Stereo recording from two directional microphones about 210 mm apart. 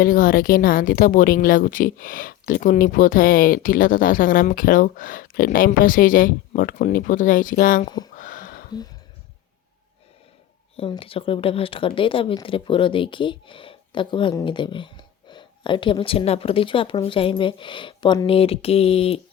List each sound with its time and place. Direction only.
0.0 s a woman's voice: 40° left (ahead or behind)
7.9 s speech: 20° left (ahead or behind)
8.1 s a sound: 40° left (ahead or behind)
10.8 s speech: 25° left (ahead or behind)